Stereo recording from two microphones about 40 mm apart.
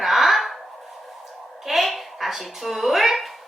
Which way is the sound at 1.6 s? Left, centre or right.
Centre.